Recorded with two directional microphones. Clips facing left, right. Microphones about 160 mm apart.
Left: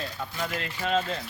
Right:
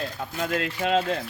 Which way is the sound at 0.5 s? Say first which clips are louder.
Right 4 dB; 80° right.